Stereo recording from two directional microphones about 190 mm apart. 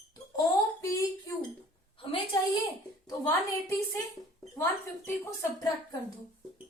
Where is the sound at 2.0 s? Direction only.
30° left (ahead or behind).